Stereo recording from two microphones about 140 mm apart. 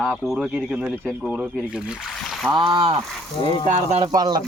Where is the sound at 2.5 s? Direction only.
35° right (ahead or behind).